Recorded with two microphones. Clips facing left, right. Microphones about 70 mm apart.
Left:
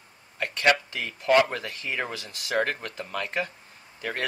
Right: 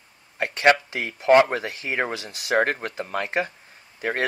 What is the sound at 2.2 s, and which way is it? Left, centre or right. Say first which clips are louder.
Speech: right 4 dB; right.